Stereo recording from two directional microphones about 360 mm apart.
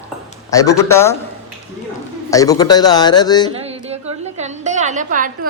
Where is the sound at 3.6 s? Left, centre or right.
Centre.